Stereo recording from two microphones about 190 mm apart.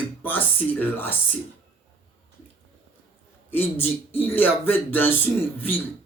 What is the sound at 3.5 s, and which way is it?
Speech, 10° left (ahead or behind).